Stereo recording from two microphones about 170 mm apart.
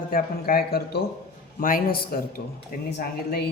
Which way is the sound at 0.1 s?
60° left (ahead or behind).